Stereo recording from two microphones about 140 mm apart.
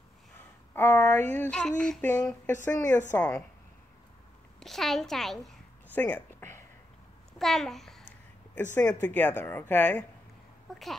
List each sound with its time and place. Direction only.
0.7 s a sound: 15° left (ahead or behind)
2.2 s a woman's voice: 20° left (ahead or behind)
4.6 s a woman's voice: centre (ahead or behind)
5.9 s speech: 15° left (ahead or behind)
7.3 s a child's voice: centre (ahead or behind)
9.0 s a woman's voice: 15° left (ahead or behind)